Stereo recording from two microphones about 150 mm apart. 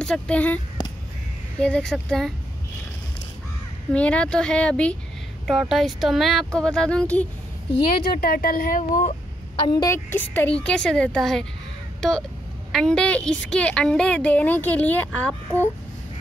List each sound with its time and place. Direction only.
0.0 s a woman's voice: 5° left (ahead or behind)
1.6 s speech: 5° left (ahead or behind)
3.9 s a woman's voice: 10° left (ahead or behind)
8.1 s speech: 80° left; by 9.1 s 60° left (ahead or behind)
9.6 s a woman's voice: 30° left (ahead or behind)
9.8 s a woman's voice: 15° left (ahead or behind)
12.7 s a woman's voice: 5° left (ahead or behind)